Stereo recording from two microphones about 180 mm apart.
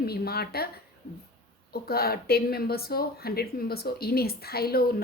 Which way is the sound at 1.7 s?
60° left (ahead or behind).